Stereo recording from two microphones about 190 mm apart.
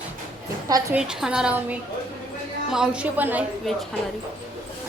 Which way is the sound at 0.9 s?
5° right (ahead or behind).